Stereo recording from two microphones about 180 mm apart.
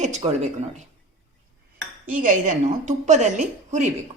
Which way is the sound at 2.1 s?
45° right (ahead or behind).